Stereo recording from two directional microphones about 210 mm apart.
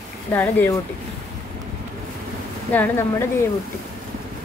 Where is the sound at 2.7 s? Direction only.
10° left (ahead or behind).